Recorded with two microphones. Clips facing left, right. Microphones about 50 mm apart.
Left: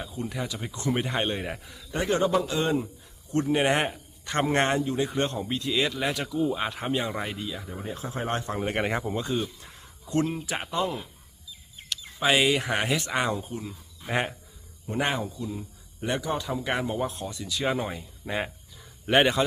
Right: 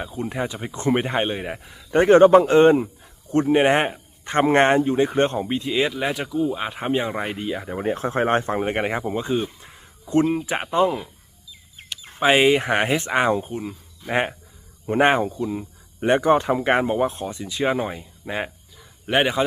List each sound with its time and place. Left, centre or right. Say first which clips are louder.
0.0 s speech: right 6 dB; right
1.2 s speech: right 4 dB; centre
1.9 s speech: right 12 dB; right
8.7 s speech: right 4 dB; centre
10.8 s speech: right 8 dB; centre
12.2 s speech: right 6 dB; right
14.8 s speech: right 10 dB; right; by 18.5 s centre
18.8 s a sound: right 1 dB; centre